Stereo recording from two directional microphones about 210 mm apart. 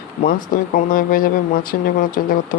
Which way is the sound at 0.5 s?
40° left (ahead or behind).